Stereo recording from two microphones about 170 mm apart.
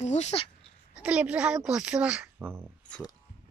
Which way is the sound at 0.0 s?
40° left (ahead or behind).